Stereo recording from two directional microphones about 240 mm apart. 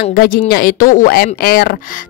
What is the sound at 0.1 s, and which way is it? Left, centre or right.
Speech, left.